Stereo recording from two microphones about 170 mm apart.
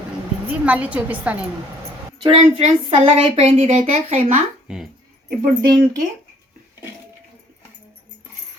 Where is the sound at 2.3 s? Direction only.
40° right (ahead or behind).